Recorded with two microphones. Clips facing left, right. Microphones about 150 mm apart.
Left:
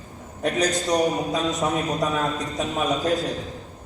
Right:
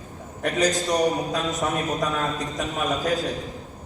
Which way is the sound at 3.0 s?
40° left (ahead or behind).